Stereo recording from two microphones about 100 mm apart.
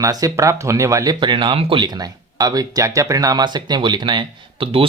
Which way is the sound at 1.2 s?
50° right (ahead or behind).